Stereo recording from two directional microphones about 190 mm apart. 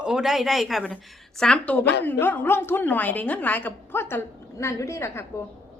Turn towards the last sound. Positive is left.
turn(degrees=15)  # may be behind; listen again after turning